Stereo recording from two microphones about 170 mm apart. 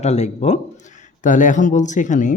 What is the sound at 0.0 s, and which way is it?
Speech, 40° left (ahead or behind).